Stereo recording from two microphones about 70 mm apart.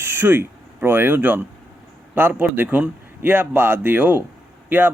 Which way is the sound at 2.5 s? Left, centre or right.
Right.